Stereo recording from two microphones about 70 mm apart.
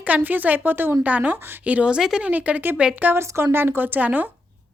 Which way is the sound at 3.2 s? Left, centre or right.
Right.